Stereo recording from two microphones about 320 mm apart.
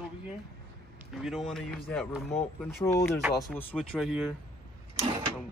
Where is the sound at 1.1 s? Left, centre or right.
Centre.